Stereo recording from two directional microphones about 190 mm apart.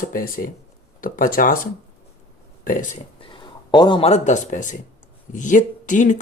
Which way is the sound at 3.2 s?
25° left (ahead or behind).